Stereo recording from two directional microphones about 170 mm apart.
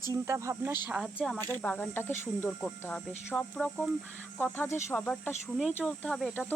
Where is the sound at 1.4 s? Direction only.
10° left (ahead or behind).